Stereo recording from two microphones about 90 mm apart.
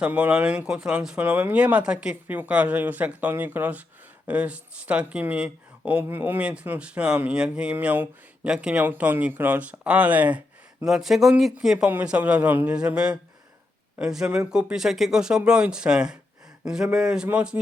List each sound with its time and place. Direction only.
0.0 s speech: 15° right (ahead or behind)
2.2 s speech: 20° right (ahead or behind)
8.8 s speech: 20° right (ahead or behind)
10.8 s speech: 5° right (ahead or behind)